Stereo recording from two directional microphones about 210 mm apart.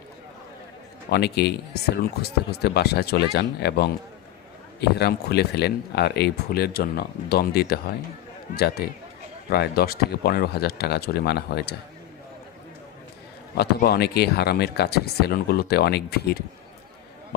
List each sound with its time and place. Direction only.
1.1 s speech: 50° left (ahead or behind)
13.6 s speech: 50° left (ahead or behind)